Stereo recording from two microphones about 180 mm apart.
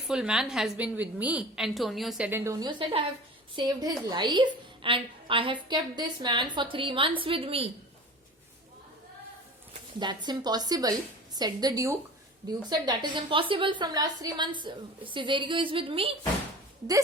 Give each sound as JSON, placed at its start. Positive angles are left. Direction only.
{"t": 0.1, "sound": "a woman's voice", "side_deg": -5}
{"t": 2.4, "sound": "a woman's voice", "side_deg": -20}
{"t": 10.0, "sound": "a woman's voice", "side_deg": -25}